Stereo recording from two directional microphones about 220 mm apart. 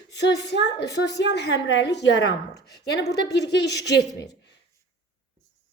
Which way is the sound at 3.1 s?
15° left (ahead or behind).